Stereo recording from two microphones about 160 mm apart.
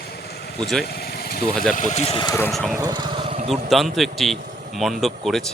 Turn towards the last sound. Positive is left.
turn(degrees=0)  # may be behind; listen again after turning